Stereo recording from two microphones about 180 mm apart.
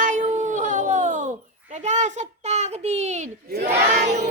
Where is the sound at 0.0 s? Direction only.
45° right (ahead or behind).